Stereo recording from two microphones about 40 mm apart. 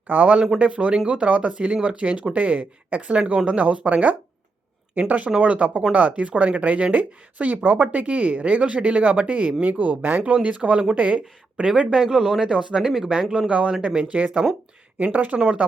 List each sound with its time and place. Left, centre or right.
0.1 s speech: right
10.4 s speech: right
11.8 s speech: centre
12.8 s speech: centre
13.5 s speech: right
14.1 s speech: right
15.4 s speech: right